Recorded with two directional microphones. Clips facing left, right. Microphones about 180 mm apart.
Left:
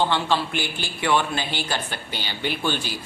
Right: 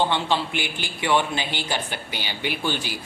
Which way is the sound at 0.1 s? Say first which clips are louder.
Left 1 dB; 15° right (ahead or behind).